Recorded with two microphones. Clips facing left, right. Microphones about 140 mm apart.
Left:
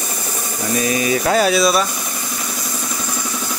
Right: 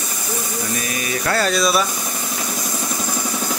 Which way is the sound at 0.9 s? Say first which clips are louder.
Left 4 dB; 20° left (ahead or behind).